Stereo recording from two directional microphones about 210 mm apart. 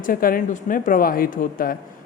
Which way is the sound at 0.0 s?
40° left (ahead or behind).